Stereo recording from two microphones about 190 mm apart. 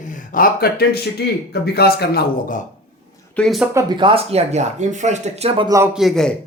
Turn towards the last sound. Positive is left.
turn(degrees=0)  # may be behind; listen again after turning